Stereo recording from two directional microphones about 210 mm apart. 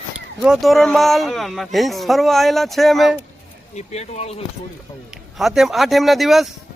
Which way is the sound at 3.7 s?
30° left (ahead or behind).